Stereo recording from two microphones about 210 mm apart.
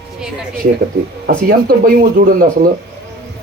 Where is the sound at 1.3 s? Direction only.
45° right (ahead or behind).